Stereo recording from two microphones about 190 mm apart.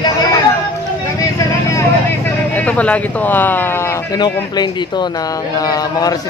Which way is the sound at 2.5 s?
10° left (ahead or behind).